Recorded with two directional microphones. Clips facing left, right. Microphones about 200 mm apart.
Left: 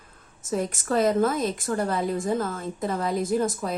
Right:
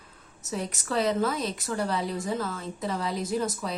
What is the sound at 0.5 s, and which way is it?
A woman's voice, 50° left (ahead or behind).